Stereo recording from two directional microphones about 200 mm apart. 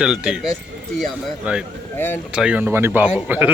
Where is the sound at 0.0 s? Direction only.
5° right (ahead or behind).